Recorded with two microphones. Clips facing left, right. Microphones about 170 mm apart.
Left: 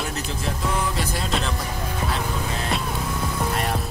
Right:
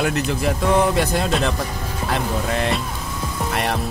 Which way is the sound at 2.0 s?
70° right (ahead or behind).